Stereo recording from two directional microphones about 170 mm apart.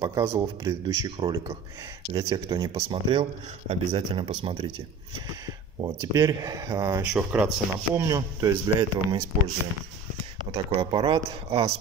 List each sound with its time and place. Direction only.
0.0 s speech: 15° right (ahead or behind)
5.8 s speech: 15° right (ahead or behind)
7.1 s speech: 5° right (ahead or behind)
7.9 s speech: 20° right (ahead or behind)
10.5 s speech: 35° right (ahead or behind)